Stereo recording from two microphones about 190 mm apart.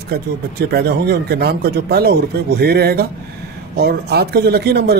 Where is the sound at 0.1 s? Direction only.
55° right (ahead or behind).